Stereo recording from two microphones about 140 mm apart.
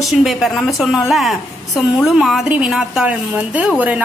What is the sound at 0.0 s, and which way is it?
A woman's voice, centre (ahead or behind).